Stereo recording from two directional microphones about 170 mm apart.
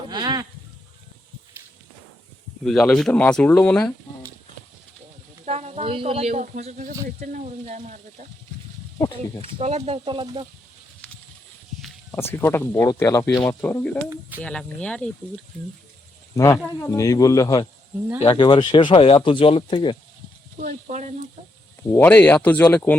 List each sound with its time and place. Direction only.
0.1 s a sound: 25° right (ahead or behind)
2.6 s speech: 5° left (ahead or behind)
5.5 s speech: 40° right (ahead or behind)
9.4 s speech: 35° right (ahead or behind)
12.1 s speech: 15° left (ahead or behind)
14.1 s speech: 10° right (ahead or behind)
14.4 s speech: 5° left (ahead or behind)
16.4 s speech: 15° left (ahead or behind)
18.2 s speech: 30° left (ahead or behind)
20.6 s speech: 45° right (ahead or behind)
21.9 s speech: 10° left (ahead or behind)